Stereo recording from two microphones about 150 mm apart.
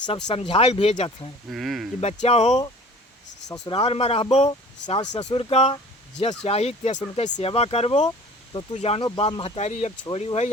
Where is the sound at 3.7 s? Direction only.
40° left (ahead or behind).